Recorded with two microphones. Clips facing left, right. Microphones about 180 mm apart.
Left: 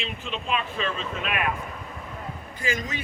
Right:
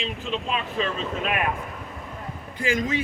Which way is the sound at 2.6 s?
90° right.